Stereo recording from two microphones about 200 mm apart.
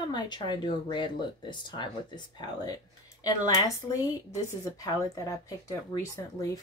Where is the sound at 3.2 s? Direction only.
20° left (ahead or behind).